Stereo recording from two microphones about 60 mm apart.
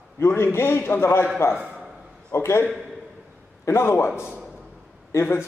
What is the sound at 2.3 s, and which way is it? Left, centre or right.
Speech, left.